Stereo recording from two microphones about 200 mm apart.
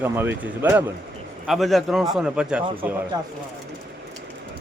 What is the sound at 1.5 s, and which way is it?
A man's voice, centre (ahead or behind).